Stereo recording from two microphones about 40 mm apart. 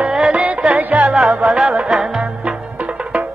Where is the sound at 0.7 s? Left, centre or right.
Right.